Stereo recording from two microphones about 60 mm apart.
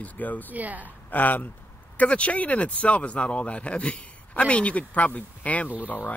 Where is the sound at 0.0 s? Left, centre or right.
Left.